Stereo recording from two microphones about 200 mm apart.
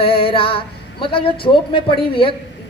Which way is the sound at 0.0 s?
25° left (ahead or behind).